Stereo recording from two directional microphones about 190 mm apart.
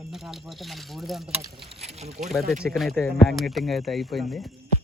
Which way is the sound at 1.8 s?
35° right (ahead or behind).